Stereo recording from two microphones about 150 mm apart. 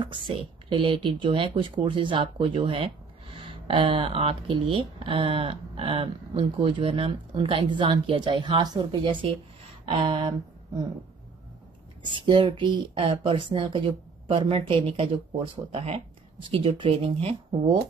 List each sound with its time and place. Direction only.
0.3 s speech: 35° right (ahead or behind)
12.0 s speech: 30° right (ahead or behind)